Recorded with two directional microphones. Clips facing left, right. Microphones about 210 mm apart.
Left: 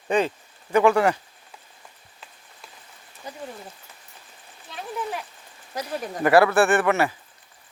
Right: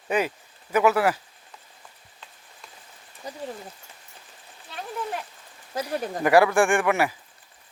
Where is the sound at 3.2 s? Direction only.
35° right (ahead or behind).